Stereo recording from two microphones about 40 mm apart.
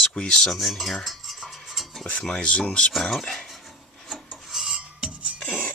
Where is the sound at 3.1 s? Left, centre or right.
Centre.